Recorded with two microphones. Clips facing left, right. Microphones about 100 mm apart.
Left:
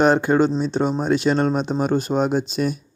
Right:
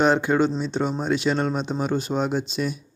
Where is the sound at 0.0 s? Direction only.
45° left (ahead or behind).